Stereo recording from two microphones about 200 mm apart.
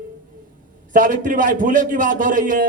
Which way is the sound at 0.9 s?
40° right (ahead or behind).